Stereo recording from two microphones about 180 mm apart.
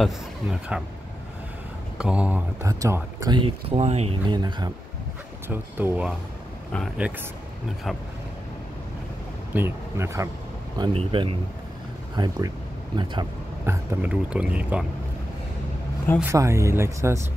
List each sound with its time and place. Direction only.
0.0 s speech: centre (ahead or behind)
2.0 s speech: 5° right (ahead or behind); by 4.2 s 35° right (ahead or behind)
4.3 s speech: 25° right (ahead or behind)
5.5 s speech: 10° right (ahead or behind)
9.5 s speech: 15° right (ahead or behind)
10.8 s speech: 30° right (ahead or behind)
13.7 s speech: 10° right (ahead or behind)
16.2 s speech: 15° right (ahead or behind)